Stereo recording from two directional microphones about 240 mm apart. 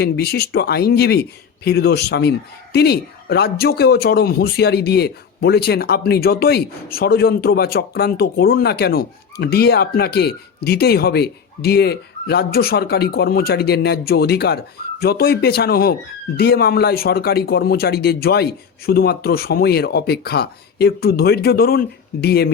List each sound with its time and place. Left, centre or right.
0.0 s speech: left